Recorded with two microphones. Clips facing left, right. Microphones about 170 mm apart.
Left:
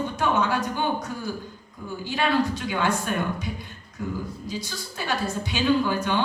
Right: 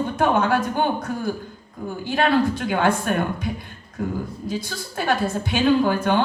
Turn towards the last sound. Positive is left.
turn(degrees=-50)  # may be behind; listen again after turning